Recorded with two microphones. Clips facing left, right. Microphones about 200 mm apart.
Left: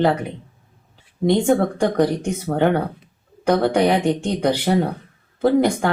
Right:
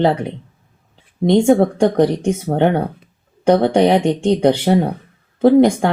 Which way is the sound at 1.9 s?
35° right (ahead or behind).